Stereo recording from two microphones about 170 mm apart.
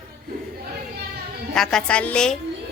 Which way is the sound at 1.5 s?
5° left (ahead or behind).